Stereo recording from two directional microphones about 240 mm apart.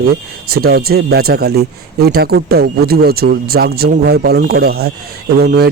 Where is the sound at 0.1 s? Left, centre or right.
Right.